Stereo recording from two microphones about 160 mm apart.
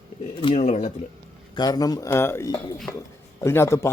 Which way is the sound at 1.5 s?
25° left (ahead or behind).